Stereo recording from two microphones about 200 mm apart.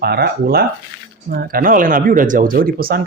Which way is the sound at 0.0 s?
50° right (ahead or behind).